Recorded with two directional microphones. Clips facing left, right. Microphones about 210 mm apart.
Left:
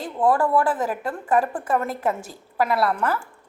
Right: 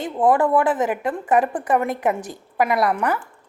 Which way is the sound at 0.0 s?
20° right (ahead or behind).